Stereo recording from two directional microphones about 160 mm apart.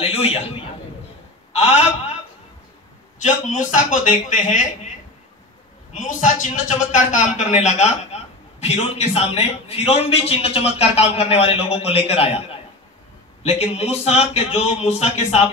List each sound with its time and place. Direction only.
0.0 s a sound: 35° left (ahead or behind)
1.5 s a man's voice: 40° left (ahead or behind)
3.4 s speech: 50° left (ahead or behind)
5.9 s a man's voice: 55° left (ahead or behind)
13.4 s a man's voice: 40° left (ahead or behind)